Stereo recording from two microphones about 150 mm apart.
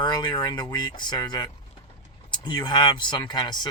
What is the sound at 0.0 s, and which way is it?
Speech, 30° left (ahead or behind).